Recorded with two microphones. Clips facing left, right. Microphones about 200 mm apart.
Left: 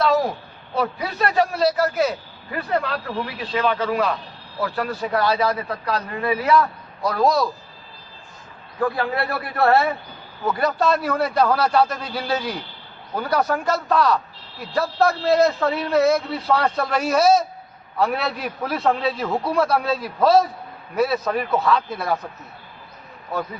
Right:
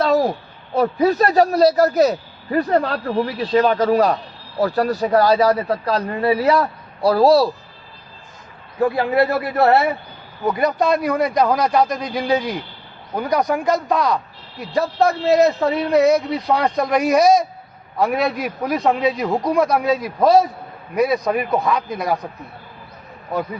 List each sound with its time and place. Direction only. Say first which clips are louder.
0.0 s a sound: right 3 dB; 40° right (ahead or behind)
0.8 s a man's voice: right 7 dB; 40° right (ahead or behind)
8.8 s a man's voice: right 6 dB; 20° right (ahead or behind)